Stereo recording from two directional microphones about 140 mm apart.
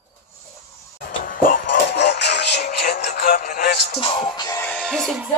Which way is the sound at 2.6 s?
85° left.